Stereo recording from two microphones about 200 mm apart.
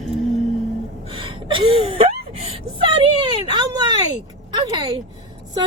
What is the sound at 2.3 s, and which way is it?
Whimper, 25° right (ahead or behind).